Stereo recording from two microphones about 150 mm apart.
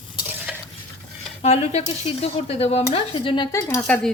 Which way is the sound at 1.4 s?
45° left (ahead or behind).